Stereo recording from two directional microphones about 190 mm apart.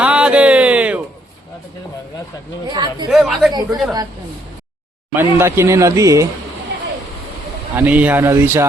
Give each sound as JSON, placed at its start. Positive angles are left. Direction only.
{"t": 0.0, "sound": "a sound", "side_deg": -5}
{"t": 2.6, "sound": "speech", "side_deg": -20}
{"t": 3.1, "sound": "speech", "side_deg": 0}
{"t": 3.5, "sound": "speech", "side_deg": -20}
{"t": 5.1, "sound": "speech", "side_deg": -15}
{"t": 7.8, "sound": "speech", "side_deg": -10}